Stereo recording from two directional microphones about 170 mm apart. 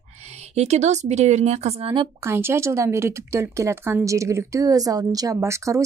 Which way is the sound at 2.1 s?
15° right (ahead or behind).